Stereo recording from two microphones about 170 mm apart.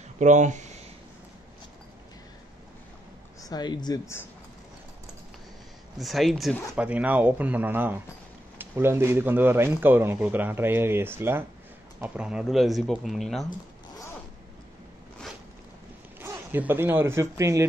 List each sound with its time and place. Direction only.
0.2 s speech: 45° right (ahead or behind)
3.3 s speech: 20° left (ahead or behind)
5.9 s speech: centre (ahead or behind)
16.2 s speech: 10° right (ahead or behind)